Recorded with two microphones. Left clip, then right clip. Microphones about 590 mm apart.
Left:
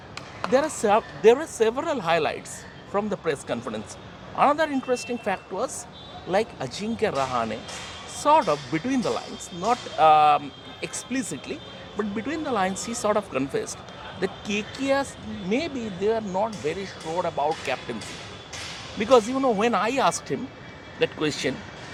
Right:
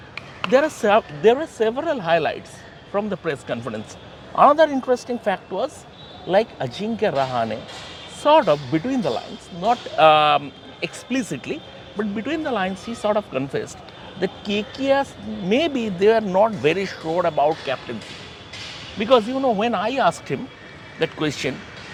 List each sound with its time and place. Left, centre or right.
0.4 s speech: centre
18.9 s speech: centre